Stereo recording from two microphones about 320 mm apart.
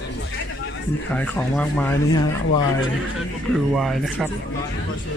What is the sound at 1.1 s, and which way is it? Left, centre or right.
Speech, centre.